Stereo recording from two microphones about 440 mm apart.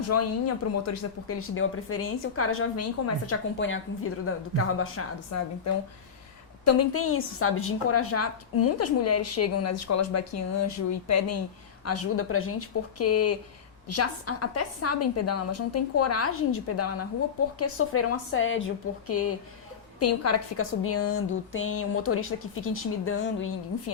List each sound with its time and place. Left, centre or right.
0.1 s a woman's voice: left
6.7 s a woman's voice: left